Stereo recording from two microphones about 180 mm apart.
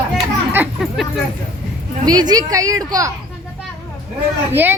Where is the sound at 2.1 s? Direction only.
20° right (ahead or behind).